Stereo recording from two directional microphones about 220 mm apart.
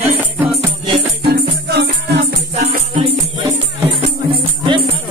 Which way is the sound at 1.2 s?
50° right (ahead or behind).